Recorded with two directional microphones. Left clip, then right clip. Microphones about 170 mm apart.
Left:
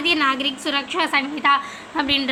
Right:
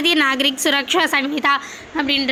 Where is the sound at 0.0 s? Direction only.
35° right (ahead or behind).